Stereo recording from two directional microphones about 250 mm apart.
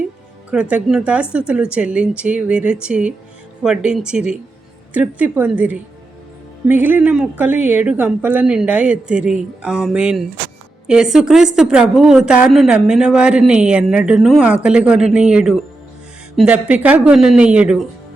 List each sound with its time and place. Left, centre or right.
0.5 s a woman's voice: centre